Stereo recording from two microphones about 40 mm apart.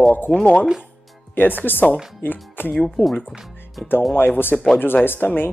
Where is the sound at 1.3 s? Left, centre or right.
Left.